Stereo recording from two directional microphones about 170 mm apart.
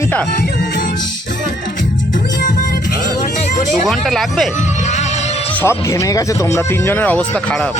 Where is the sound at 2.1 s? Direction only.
50° left (ahead or behind).